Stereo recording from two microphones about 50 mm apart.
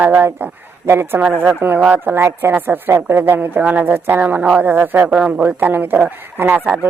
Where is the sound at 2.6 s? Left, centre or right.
Right.